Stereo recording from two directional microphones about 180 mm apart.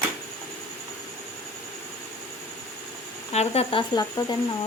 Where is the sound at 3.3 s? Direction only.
35° left (ahead or behind).